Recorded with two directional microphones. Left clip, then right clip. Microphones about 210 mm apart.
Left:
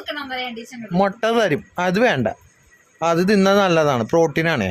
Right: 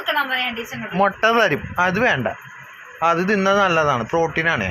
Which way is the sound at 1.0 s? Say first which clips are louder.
Right 2 dB; 30° left (ahead or behind).